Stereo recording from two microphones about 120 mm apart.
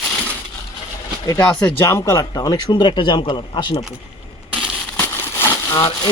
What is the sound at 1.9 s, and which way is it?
A man's voice, 25° left (ahead or behind).